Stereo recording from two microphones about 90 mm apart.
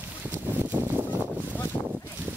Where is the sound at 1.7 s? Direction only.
25° left (ahead or behind).